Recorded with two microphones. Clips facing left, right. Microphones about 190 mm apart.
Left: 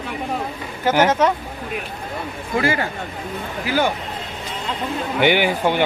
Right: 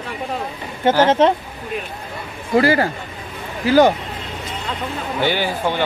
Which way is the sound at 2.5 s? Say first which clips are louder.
Right 6 dB; 35° right (ahead or behind).